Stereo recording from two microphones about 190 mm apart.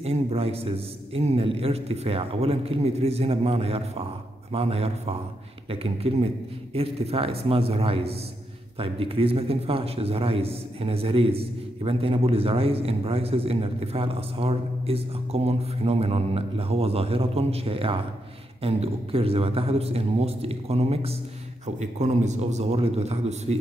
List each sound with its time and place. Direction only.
0.0 s a man's voice: 30° right (ahead or behind)